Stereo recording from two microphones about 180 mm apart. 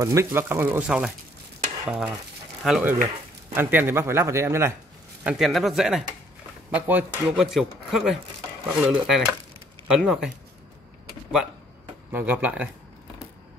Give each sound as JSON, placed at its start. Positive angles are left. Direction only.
{"t": 0.0, "sound": "a man's voice", "side_deg": -15}
{"t": 5.2, "sound": "speech", "side_deg": -5}
{"t": 12.1, "sound": "a man's voice", "side_deg": -10}